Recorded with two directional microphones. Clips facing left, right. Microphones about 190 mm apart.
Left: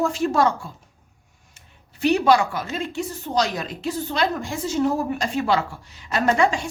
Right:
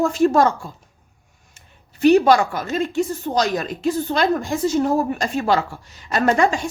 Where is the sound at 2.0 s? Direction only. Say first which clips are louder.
Right 4 dB; 45° right (ahead or behind).